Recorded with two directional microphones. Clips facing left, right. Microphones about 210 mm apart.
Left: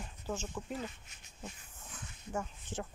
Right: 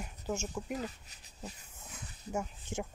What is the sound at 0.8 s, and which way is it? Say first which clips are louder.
Speech: right 2 dB; 35° right (ahead or behind).